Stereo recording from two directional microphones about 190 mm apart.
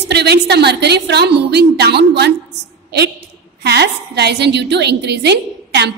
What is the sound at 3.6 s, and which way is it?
A woman's voice, 60° right (ahead or behind).